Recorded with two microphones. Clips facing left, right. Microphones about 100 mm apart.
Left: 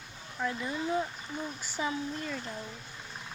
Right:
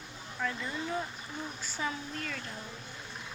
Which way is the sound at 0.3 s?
15° left (ahead or behind).